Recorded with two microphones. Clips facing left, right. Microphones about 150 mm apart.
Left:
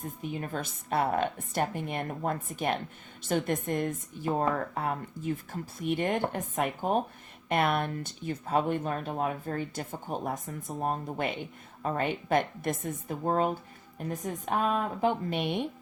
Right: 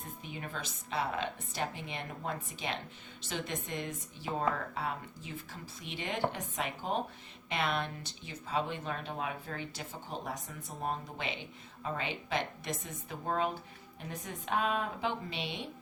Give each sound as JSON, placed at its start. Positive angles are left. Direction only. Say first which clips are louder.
{"t": 0.2, "sound": "speech", "louder": "left 8 dB", "side_deg": 45}